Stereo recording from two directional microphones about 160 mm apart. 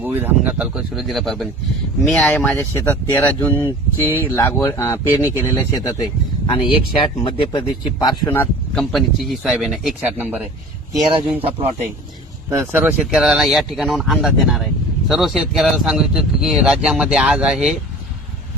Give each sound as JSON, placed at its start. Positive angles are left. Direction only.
{"t": 0.0, "sound": "speech", "side_deg": -10}
{"t": 8.3, "sound": "speech", "side_deg": 15}
{"t": 8.8, "sound": "speech", "side_deg": 0}
{"t": 10.2, "sound": "speech", "side_deg": -15}
{"t": 12.5, "sound": "speech", "side_deg": -20}
{"t": 12.8, "sound": "speech", "side_deg": -5}